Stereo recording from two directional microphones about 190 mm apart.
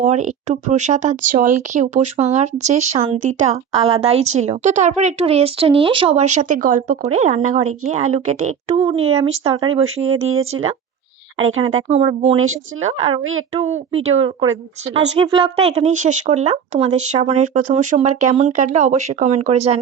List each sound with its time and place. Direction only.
0.0 s speech: 40° right (ahead or behind)
11.9 s speech: 35° right (ahead or behind)
13.0 s a woman's voice: 90° right
13.5 s speech: 35° right (ahead or behind)